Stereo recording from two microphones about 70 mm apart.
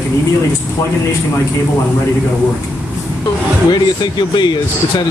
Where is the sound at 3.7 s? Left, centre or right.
Left.